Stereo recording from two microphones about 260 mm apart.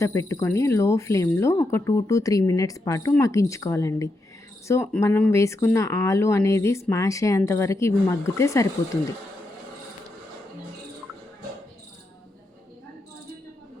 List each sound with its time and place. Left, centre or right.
0.0 s speech: centre